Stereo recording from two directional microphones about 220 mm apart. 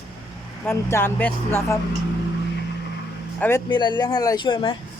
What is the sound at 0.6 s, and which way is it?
Speech, 10° left (ahead or behind).